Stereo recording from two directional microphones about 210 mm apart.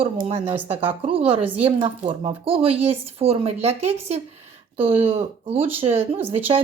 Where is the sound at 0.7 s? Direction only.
10° right (ahead or behind).